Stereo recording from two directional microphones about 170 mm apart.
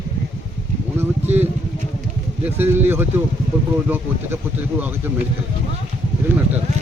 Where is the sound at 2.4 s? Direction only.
10° right (ahead or behind).